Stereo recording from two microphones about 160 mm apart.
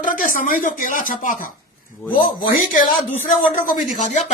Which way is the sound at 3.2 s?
55° left (ahead or behind).